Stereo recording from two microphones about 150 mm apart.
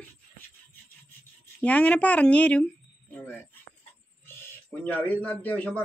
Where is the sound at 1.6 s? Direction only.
10° left (ahead or behind).